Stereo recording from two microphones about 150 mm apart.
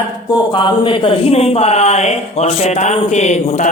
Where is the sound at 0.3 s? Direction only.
30° left (ahead or behind).